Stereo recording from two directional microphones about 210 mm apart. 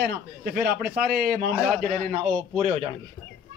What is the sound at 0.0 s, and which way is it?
Speech, 45° right (ahead or behind).